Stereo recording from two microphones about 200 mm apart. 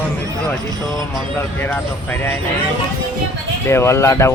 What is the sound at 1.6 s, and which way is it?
Speech, 10° left (ahead or behind).